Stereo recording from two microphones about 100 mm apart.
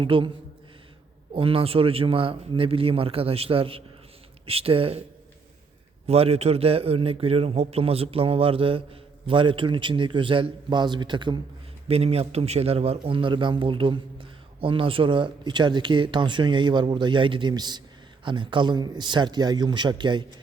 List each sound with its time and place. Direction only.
0.0 s a man's voice: 60° right (ahead or behind)
1.3 s a man's voice: 65° right (ahead or behind)
6.1 s a man's voice: 90° right; by 11.3 s 50° right (ahead or behind)
11.9 s a man's voice: 90° right; by 20.2 s 50° right (ahead or behind)